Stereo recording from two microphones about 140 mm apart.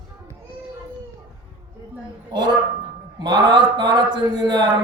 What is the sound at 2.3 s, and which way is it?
A woman's voice, 30° right (ahead or behind).